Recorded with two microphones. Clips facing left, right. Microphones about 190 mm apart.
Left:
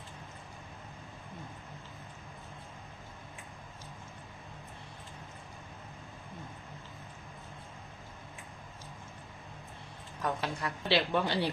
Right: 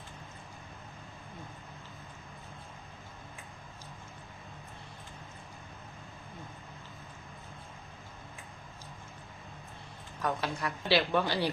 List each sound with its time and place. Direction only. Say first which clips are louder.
10.4 s a woman's voice: right 1 dB; 25° left (ahead or behind)